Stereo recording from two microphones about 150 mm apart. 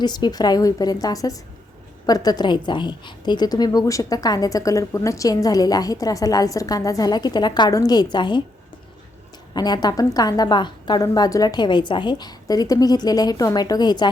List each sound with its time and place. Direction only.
0.0 s a woman's voice: 30° left (ahead or behind)
9.6 s a woman's voice: 25° left (ahead or behind)